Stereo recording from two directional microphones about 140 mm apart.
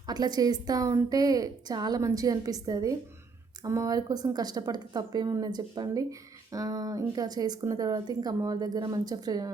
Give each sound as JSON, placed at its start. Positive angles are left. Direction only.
{"t": 0.1, "sound": "speech", "side_deg": -30}